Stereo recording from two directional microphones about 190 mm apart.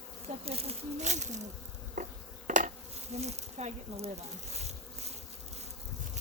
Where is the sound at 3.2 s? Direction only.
35° right (ahead or behind).